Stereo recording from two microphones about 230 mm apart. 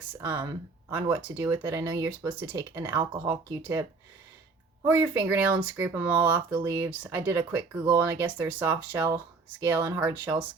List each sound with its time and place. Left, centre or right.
0.1 s speech: centre